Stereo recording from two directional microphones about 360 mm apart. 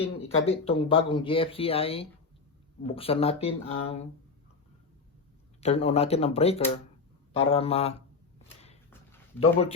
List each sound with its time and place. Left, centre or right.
0.2 s speech: centre
5.5 s speech: centre
9.4 s speech: centre